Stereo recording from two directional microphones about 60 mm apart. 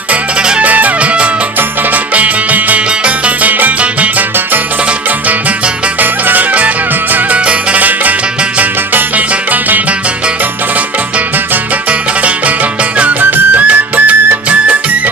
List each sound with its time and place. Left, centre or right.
0.1 s music: centre
0.6 s music: right
6.0 s music: right
11.9 s music: right